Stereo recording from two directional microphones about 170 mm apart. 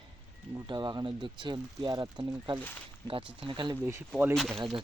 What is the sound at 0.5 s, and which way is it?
Speech, 25° right (ahead or behind).